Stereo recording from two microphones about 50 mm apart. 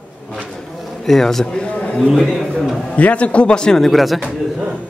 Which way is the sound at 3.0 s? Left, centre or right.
Left.